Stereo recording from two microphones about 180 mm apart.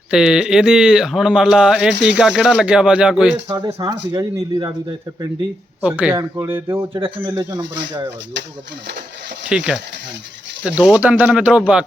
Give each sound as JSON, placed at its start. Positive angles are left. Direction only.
{"t": 0.1, "sound": "speech", "side_deg": -5}
{"t": 3.5, "sound": "speech", "side_deg": -25}
{"t": 5.8, "sound": "speech", "side_deg": -10}
{"t": 9.5, "sound": "speech", "side_deg": -5}